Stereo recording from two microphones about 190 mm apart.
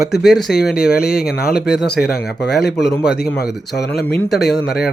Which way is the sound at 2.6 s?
60° left (ahead or behind).